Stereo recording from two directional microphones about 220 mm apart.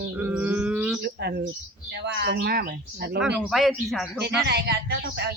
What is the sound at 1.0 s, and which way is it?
Speech, 45° right (ahead or behind).